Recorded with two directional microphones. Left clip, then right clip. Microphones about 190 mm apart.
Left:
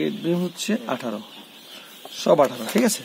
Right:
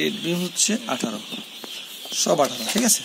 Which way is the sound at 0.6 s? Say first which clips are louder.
Right 1 dB; 40° left (ahead or behind).